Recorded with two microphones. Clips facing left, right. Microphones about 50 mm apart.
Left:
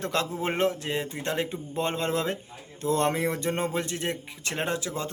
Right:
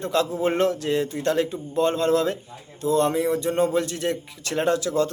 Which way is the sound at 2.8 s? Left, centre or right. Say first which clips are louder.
Right 4 dB; left.